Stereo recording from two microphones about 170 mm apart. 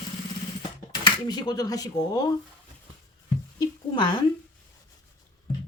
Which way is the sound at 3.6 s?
25° left (ahead or behind).